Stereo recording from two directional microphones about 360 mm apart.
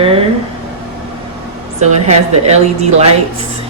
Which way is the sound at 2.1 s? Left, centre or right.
Centre.